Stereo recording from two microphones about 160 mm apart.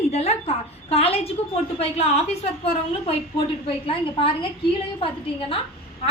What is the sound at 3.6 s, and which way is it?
A woman's voice, 35° left (ahead or behind).